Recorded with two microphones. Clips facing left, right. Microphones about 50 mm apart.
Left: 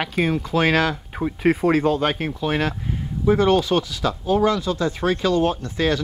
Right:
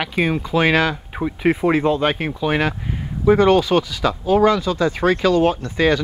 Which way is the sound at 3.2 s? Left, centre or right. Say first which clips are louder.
Right 4 dB; right.